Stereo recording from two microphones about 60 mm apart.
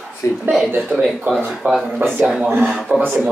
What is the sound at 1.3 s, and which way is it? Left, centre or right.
Speech, right.